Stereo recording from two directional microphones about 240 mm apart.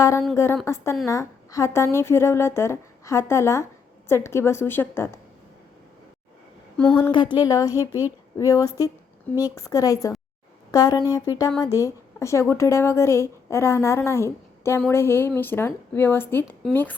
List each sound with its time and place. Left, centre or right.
0.0 s a woman's voice: centre
6.9 s a woman's voice: centre